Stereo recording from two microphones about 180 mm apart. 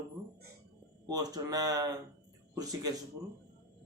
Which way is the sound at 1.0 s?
20° right (ahead or behind).